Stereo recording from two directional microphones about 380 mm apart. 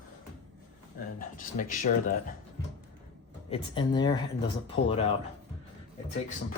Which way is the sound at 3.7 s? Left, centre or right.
Centre.